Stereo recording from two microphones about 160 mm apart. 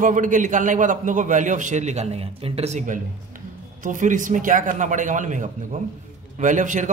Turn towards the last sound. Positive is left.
turn(degrees=-50)  # may be behind; listen again after turning